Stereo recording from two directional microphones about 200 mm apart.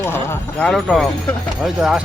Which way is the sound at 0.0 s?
10° left (ahead or behind).